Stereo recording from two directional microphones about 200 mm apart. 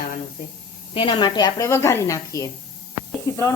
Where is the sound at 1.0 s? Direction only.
25° left (ahead or behind).